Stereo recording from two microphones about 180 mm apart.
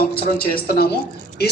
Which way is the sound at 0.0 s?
55° left (ahead or behind).